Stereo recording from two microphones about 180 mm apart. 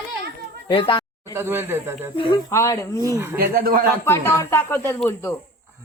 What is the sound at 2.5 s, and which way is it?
Speech, 15° left (ahead or behind).